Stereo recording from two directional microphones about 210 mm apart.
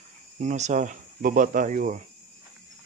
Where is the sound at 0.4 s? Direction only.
35° right (ahead or behind).